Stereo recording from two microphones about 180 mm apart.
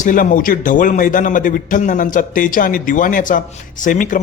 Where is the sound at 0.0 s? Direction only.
45° left (ahead or behind).